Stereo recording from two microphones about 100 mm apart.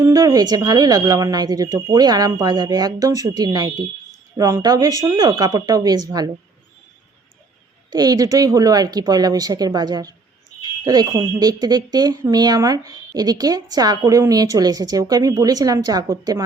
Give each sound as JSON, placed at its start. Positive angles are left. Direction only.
{"t": 0.0, "sound": "speech", "side_deg": -35}
{"t": 7.9, "sound": "speech", "side_deg": -40}